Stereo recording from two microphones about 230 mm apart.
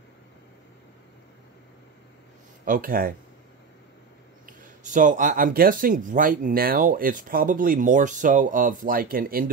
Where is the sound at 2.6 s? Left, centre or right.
Right.